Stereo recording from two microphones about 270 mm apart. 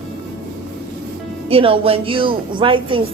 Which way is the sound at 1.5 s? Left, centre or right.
Centre.